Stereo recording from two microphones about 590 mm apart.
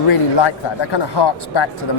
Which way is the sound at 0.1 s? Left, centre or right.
Left.